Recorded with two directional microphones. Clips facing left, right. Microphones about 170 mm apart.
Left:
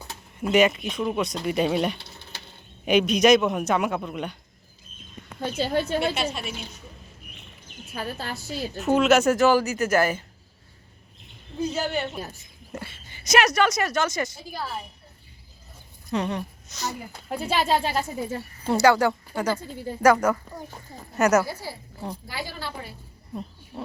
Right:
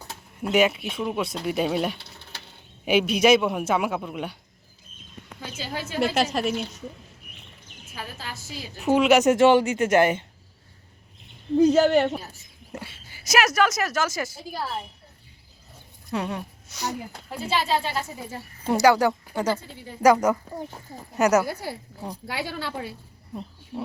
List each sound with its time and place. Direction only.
0.3 s a woman's voice: centre (ahead or behind)
5.4 s a woman's voice: 55° left (ahead or behind)
6.0 s a woman's voice: 90° right
7.9 s a woman's voice: 55° left (ahead or behind)
8.8 s a woman's voice: 10° right (ahead or behind)
11.5 s a woman's voice: 90° right
12.7 s a woman's voice: 10° right (ahead or behind)
16.1 s a woman's voice: 5° right (ahead or behind)
17.2 s speech: 50° left (ahead or behind)
18.7 s a woman's voice: 15° right (ahead or behind)
20.9 s a woman's voice: 10° right (ahead or behind)
21.4 s a woman's voice: 55° right (ahead or behind)
22.3 s a woman's voice: 75° right (ahead or behind)
23.7 s a woman's voice: 15° right (ahead or behind)